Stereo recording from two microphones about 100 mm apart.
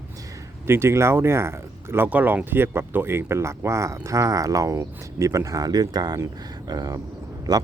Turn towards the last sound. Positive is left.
turn(degrees=-40)  # may be behind; listen again after turning